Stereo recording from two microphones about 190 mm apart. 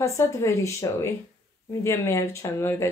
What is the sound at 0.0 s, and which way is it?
Speech, 15° left (ahead or behind).